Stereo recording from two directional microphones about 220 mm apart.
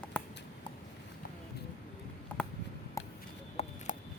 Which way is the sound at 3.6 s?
30° left (ahead or behind).